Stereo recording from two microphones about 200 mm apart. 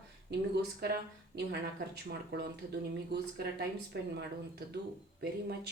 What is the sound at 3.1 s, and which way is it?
Speech, 55° right (ahead or behind).